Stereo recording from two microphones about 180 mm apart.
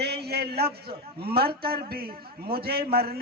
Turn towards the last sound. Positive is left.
turn(degrees=-60)  # may be behind; listen again after turning